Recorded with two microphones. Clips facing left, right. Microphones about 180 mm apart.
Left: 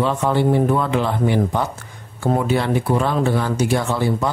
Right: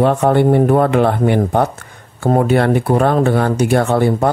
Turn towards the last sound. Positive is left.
turn(degrees=-55)  # may be behind; listen again after turning